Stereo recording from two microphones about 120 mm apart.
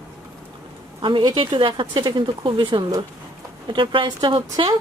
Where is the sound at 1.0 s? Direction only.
40° right (ahead or behind).